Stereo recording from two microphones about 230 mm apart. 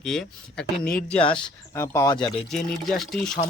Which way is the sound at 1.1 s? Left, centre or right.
Left.